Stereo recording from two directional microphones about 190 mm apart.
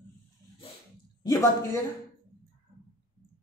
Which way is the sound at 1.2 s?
15° left (ahead or behind).